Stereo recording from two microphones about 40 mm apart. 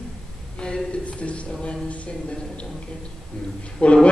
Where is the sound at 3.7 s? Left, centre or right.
Left.